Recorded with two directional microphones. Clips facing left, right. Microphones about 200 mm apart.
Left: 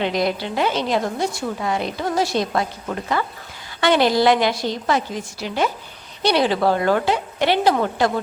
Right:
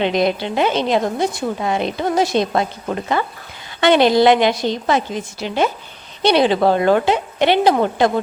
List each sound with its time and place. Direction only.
0.0 s a woman's voice: 20° right (ahead or behind)